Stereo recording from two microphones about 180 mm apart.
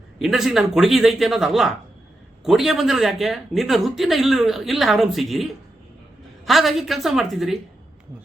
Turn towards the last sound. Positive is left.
turn(degrees=0)  # may be behind; listen again after turning